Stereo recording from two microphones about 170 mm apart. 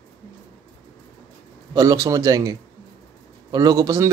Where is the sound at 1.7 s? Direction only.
20° right (ahead or behind).